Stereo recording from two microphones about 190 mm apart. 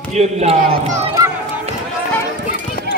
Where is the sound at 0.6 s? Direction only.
50° right (ahead or behind).